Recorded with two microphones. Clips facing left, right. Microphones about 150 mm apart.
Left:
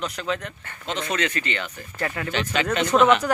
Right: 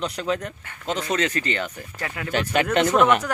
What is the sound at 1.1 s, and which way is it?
Speech, 35° right (ahead or behind).